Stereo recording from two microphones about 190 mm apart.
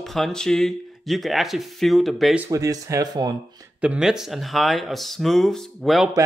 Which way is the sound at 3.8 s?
5° right (ahead or behind).